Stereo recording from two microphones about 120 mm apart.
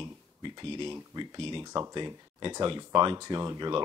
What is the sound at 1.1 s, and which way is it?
Speech, 40° right (ahead or behind).